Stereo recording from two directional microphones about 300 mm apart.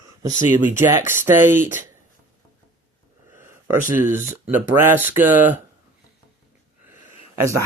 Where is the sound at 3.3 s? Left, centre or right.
Centre.